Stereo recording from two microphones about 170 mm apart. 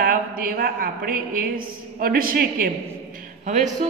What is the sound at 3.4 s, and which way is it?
Speech, 45° right (ahead or behind).